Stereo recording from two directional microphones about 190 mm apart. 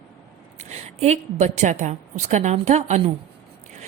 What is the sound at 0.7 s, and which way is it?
A woman's voice, 35° right (ahead or behind).